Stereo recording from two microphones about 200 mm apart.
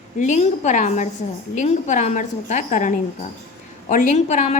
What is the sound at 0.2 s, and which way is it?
A woman's voice, 35° left (ahead or behind).